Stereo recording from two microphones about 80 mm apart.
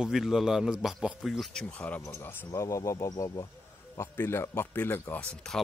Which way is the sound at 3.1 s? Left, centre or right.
Left.